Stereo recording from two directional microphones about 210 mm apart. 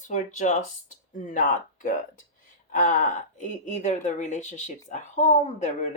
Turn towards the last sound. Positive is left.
turn(degrees=35)  # may be behind; listen again after turning